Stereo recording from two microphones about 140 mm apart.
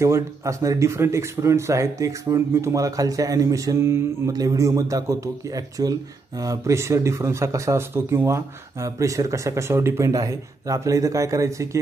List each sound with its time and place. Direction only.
0.0 s speech: 20° right (ahead or behind)